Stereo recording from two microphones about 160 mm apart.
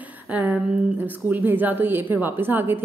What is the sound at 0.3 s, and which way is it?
A woman's voice, 10° right (ahead or behind).